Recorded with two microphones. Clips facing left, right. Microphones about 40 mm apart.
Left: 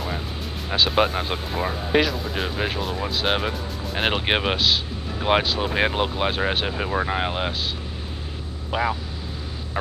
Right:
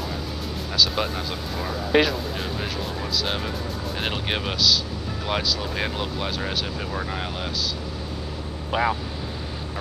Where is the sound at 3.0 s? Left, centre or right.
Left.